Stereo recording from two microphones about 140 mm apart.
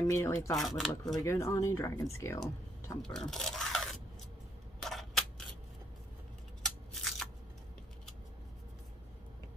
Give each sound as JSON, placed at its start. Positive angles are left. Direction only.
{"t": 0.0, "sound": "speech", "side_deg": 20}
{"t": 0.6, "sound": "speech", "side_deg": 0}
{"t": 1.0, "sound": "speech", "side_deg": 25}
{"t": 3.0, "sound": "speech", "side_deg": 5}
{"t": 4.8, "sound": "a sound", "side_deg": 0}
{"t": 6.6, "sound": "a sound", "side_deg": 0}